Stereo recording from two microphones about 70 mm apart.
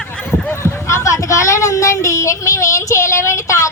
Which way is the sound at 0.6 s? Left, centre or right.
Left.